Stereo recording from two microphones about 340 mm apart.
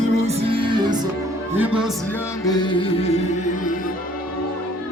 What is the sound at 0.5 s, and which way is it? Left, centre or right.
Music, centre.